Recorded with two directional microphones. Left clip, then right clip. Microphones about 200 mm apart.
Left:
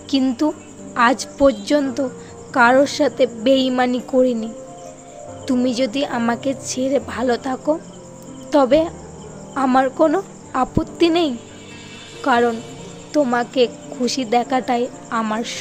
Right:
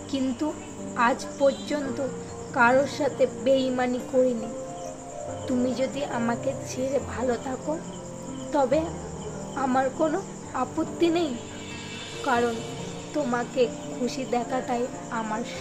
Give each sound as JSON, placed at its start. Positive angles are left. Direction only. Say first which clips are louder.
{"t": 0.1, "sound": "speech", "louder": "left 10 dB", "side_deg": 45}
{"t": 5.5, "sound": "speech", "louder": "left 7 dB", "side_deg": 50}
{"t": 8.5, "sound": "speech", "louder": "left 9 dB", "side_deg": 50}
{"t": 12.4, "sound": "a woman's voice", "louder": "left 8 dB", "side_deg": 0}
{"t": 13.3, "sound": "speech", "louder": "left 7 dB", "side_deg": 50}